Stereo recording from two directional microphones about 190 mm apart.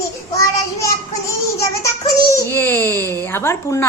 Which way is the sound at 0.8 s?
15° left (ahead or behind).